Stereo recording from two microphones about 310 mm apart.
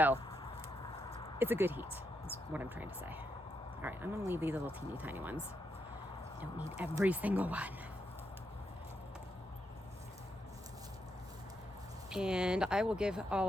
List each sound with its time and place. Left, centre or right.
1.4 s speech: centre
6.4 s speech: centre
12.1 s speech: centre